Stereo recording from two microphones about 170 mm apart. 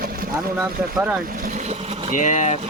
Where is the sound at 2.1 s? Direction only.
50° left (ahead or behind).